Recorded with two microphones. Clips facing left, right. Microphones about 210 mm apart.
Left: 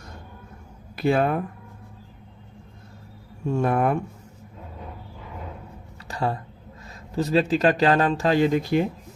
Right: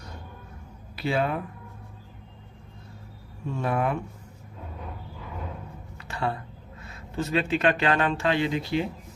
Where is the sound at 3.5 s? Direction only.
45° left (ahead or behind).